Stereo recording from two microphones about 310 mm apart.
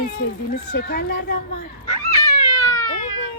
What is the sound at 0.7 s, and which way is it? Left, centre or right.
Speech, left.